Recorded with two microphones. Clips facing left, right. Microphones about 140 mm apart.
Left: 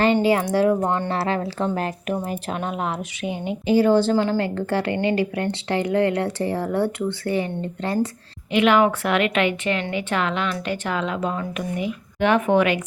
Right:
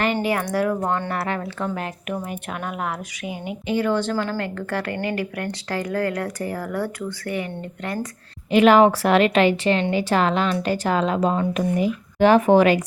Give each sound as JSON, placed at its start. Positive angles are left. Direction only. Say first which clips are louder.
{"t": 0.0, "sound": "a woman's voice", "louder": "left 4 dB", "side_deg": 30}
{"t": 0.7, "sound": "speech", "louder": "left 2 dB", "side_deg": 15}
{"t": 1.1, "sound": "a woman's voice", "louder": "left 3 dB", "side_deg": 30}
{"t": 2.5, "sound": "a woman's voice", "louder": "left 1 dB", "side_deg": 25}
{"t": 8.4, "sound": "speech", "louder": "right 3 dB", "side_deg": -40}